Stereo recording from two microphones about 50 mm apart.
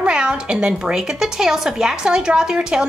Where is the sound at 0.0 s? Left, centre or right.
Centre.